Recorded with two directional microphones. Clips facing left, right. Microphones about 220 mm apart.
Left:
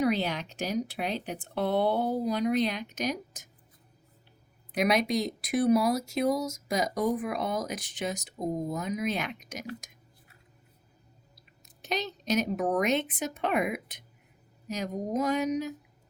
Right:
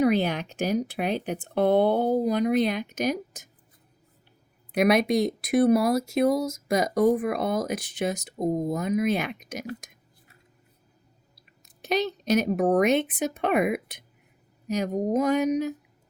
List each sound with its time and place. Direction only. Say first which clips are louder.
0.0 s speech: right 5 dB; 55° right (ahead or behind)
4.7 s speech: right 5 dB; 55° right (ahead or behind)
11.9 s speech: right 6 dB; 55° right (ahead or behind)